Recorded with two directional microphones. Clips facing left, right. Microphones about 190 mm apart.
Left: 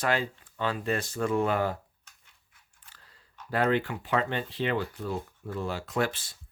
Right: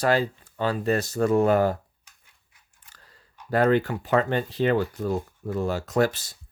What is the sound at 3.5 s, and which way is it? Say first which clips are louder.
Speech: right 5 dB; 40° right (ahead or behind).